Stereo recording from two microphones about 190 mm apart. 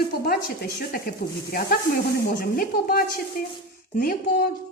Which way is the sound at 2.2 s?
55° left (ahead or behind).